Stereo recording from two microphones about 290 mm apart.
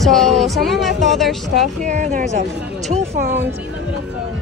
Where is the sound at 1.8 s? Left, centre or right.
Right.